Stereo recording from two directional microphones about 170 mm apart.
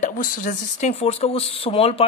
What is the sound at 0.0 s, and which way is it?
Speech, 50° left (ahead or behind).